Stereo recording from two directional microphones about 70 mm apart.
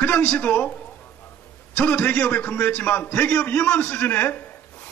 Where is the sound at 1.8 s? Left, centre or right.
Centre.